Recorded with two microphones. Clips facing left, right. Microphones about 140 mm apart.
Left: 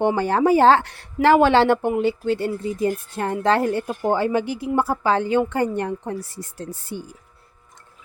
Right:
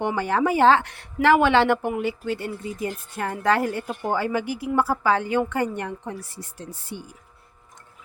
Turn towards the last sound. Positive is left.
turn(degrees=40)  # may be behind; listen again after turning